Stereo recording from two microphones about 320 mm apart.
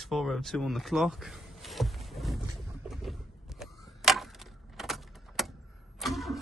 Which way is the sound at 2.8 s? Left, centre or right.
Centre.